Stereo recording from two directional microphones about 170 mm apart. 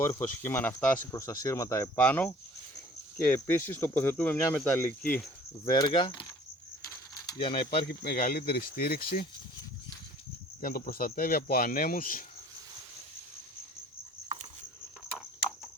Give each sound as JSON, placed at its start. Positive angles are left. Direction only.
{"t": 0.0, "sound": "speech", "side_deg": 15}
{"t": 5.7, "sound": "speech", "side_deg": 30}
{"t": 6.8, "sound": "mechanisms", "side_deg": 20}
{"t": 7.3, "sound": "speech", "side_deg": 30}
{"t": 7.9, "sound": "speech", "side_deg": 60}
{"t": 10.6, "sound": "speech", "side_deg": 60}